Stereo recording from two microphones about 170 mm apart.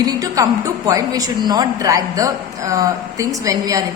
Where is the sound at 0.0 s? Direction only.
20° right (ahead or behind).